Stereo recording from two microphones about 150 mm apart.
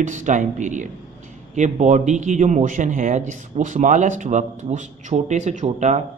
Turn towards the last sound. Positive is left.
turn(degrees=-50)  # may be behind; listen again after turning